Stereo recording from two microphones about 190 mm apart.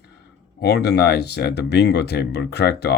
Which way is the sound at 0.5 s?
60° left (ahead or behind).